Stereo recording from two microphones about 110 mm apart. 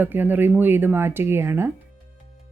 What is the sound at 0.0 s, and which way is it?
A woman's voice, 20° right (ahead or behind).